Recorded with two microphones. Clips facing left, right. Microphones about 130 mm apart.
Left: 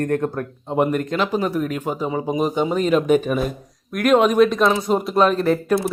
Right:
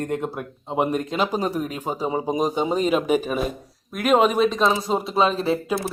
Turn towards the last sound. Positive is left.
turn(degrees=0)  # may be behind; listen again after turning